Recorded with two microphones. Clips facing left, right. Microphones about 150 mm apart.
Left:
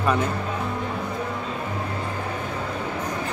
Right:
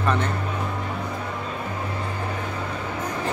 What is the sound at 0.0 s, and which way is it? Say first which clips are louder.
Speech: left 1 dB; 5° left (ahead or behind).